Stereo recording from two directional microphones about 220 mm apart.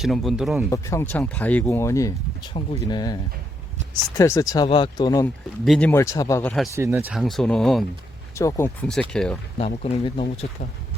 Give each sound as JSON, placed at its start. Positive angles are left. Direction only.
{"t": 0.0, "sound": "speech", "side_deg": 0}
{"t": 0.7, "sound": "speech", "side_deg": 15}
{"t": 5.6, "sound": "speech", "side_deg": 0}
{"t": 5.9, "sound": "speech", "side_deg": 15}
{"t": 6.7, "sound": "speech", "side_deg": -10}
{"t": 8.4, "sound": "speech", "side_deg": 10}
{"t": 9.6, "sound": "speech", "side_deg": 30}